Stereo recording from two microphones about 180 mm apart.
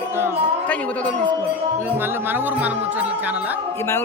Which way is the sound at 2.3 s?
10° right (ahead or behind).